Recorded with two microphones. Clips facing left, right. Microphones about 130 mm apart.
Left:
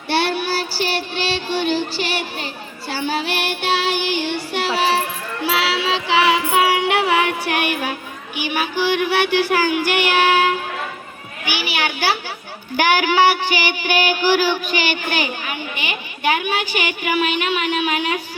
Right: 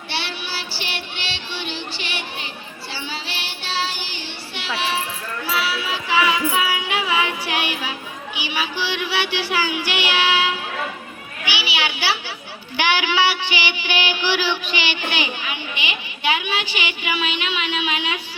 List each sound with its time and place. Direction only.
0.1 s child singing: 45° left (ahead or behind)
5.4 s music: 90° left; by 10.6 s 50° left (ahead or behind)
11.4 s children playing: 50° left (ahead or behind)
12.7 s a sound: 45° left (ahead or behind)